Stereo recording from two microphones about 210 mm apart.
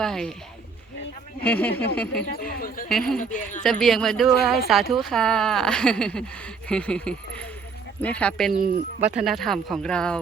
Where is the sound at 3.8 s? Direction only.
Centre (ahead or behind).